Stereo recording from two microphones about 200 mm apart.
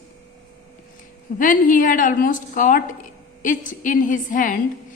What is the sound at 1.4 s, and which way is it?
A woman's voice, 40° left (ahead or behind).